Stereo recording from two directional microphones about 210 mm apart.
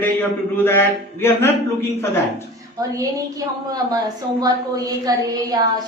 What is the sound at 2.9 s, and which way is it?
A woman's voice, 15° right (ahead or behind).